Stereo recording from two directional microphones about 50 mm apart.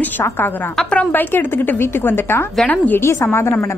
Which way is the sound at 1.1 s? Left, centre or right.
Left.